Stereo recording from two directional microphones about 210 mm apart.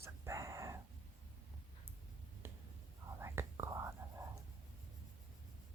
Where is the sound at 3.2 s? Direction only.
10° right (ahead or behind).